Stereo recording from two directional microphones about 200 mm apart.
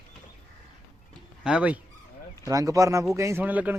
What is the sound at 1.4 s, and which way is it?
Speech, 5° right (ahead or behind).